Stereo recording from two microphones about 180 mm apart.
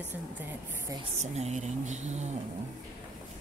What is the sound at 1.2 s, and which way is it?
Speech, 40° right (ahead or behind).